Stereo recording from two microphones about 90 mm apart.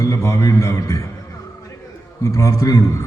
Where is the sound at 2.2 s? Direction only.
35° left (ahead or behind).